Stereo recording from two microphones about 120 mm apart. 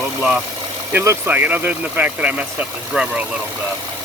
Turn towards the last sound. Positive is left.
turn(degrees=-10)  # may be behind; listen again after turning